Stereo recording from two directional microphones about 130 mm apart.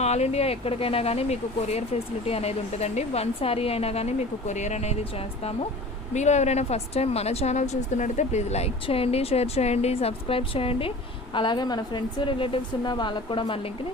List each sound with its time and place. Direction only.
0.0 s speech: 55° left (ahead or behind)
6.1 s speech: 60° left (ahead or behind); by 10.9 s 45° left (ahead or behind)
11.3 s a woman's voice: 35° left (ahead or behind)